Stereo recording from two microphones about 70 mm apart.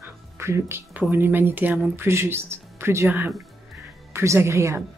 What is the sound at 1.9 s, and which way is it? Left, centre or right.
Speech, right.